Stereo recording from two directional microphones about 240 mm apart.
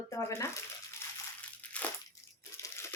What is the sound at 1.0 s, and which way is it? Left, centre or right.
Water, centre.